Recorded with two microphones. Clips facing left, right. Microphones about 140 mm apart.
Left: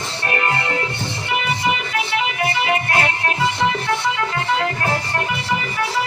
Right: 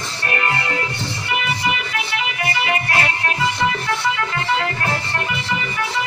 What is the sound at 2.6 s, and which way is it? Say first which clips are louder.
Music: left 1 dB; 20° left (ahead or behind).